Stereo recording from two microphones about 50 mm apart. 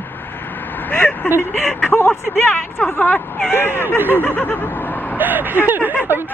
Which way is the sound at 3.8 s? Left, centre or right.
Right.